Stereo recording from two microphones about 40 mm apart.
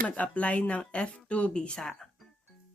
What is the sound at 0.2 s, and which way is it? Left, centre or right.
Speech, left.